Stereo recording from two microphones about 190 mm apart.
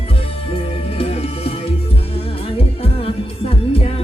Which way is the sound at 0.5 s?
30° left (ahead or behind).